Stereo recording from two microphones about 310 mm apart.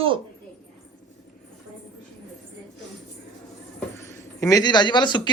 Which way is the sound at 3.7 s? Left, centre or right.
Centre.